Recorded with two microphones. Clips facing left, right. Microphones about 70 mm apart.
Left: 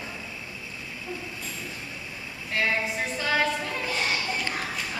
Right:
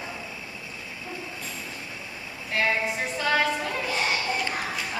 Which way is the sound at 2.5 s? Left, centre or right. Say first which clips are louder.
Right 1 dB; centre.